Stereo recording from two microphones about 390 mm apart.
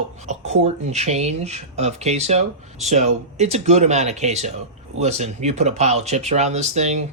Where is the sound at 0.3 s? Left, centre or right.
Centre.